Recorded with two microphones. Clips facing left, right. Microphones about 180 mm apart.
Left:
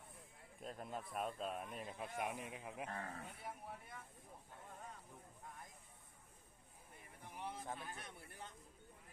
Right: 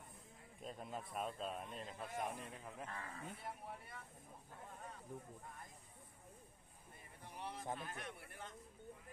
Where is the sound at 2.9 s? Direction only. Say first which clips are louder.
Left 1 dB; 45° left (ahead or behind).